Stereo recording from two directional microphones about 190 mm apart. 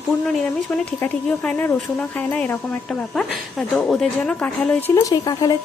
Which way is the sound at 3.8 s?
5° left (ahead or behind).